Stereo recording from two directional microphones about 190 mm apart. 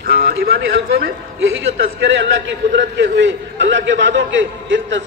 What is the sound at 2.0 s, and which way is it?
A man's voice, 70° right (ahead or behind).